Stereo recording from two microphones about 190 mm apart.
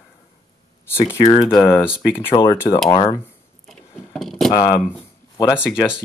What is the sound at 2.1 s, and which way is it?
Speech, 10° left (ahead or behind).